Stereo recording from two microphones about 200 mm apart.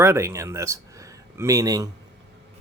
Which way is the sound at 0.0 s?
15° right (ahead or behind).